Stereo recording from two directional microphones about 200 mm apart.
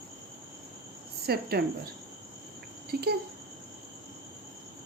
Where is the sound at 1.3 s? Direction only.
50° right (ahead or behind).